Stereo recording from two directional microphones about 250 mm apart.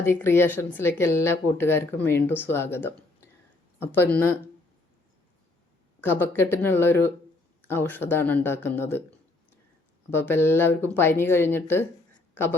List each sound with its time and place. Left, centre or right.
0.0 s speech: centre
6.0 s speech: centre
10.1 s speech: centre